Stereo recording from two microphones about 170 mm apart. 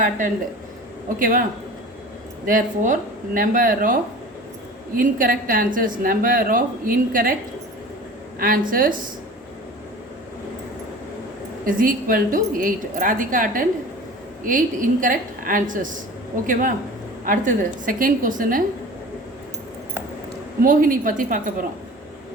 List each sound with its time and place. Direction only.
1.2 s a woman's voice: 55° right (ahead or behind)
2.5 s a woman's voice: 50° right (ahead or behind)
8.4 s a woman's voice: 55° right (ahead or behind)
11.6 s a woman's voice: 55° right (ahead or behind)
20.6 s a woman's voice: 55° right (ahead or behind)